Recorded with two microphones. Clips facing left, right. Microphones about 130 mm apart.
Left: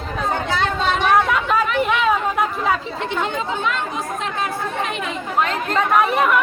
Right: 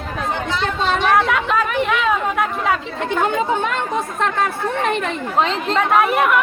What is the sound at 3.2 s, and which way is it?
Speech, 50° right (ahead or behind).